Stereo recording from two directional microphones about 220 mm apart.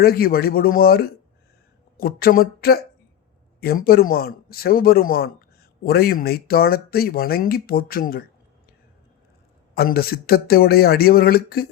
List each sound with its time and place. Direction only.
0.0 s speech: 45° left (ahead or behind)
9.7 s speech: 45° left (ahead or behind)